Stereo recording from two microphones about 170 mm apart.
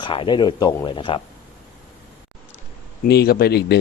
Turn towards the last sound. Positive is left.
turn(degrees=70)  # may be behind; listen again after turning